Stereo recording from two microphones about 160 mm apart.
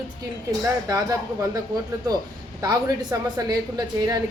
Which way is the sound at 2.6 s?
25° right (ahead or behind).